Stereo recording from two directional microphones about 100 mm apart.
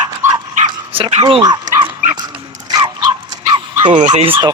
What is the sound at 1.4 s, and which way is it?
Dog, 45° right (ahead or behind).